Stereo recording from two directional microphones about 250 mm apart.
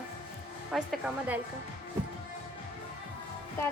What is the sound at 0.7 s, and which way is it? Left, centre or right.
Speech, centre.